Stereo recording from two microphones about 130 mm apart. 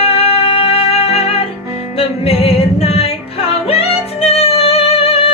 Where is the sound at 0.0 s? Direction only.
50° left (ahead or behind).